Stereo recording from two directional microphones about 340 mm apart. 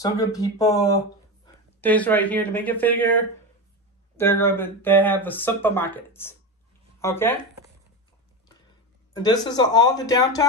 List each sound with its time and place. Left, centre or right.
0.0 s speech: centre
9.1 s speech: centre